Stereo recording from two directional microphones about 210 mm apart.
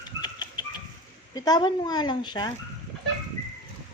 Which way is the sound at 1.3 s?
20° left (ahead or behind).